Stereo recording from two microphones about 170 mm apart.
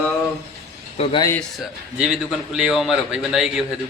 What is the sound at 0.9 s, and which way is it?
Speech, 35° left (ahead or behind).